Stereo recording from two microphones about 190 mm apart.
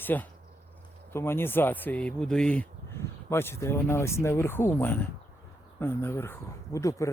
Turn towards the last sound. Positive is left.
turn(degrees=15)  # may be behind; listen again after turning